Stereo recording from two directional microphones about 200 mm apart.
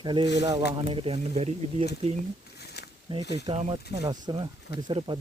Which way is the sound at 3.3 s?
30° right (ahead or behind).